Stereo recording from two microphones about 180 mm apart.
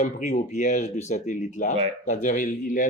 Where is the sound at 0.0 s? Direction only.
50° left (ahead or behind).